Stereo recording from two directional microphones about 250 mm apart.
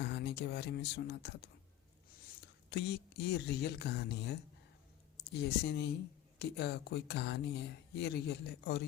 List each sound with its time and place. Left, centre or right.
0.1 s speech: left
2.6 s speech: left